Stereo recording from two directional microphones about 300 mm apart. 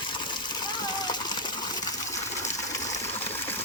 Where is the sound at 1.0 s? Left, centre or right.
Centre.